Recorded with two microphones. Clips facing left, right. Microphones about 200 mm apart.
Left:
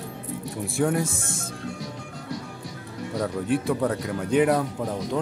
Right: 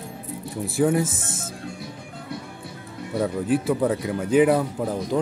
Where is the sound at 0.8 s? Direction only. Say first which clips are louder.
Right 3 dB; 5° right (ahead or behind).